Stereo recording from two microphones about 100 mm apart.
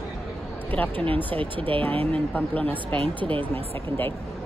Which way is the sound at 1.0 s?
65° right (ahead or behind).